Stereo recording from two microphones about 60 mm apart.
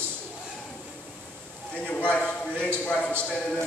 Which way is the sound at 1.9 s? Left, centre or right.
Left.